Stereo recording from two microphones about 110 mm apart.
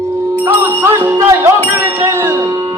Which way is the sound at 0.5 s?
25° right (ahead or behind).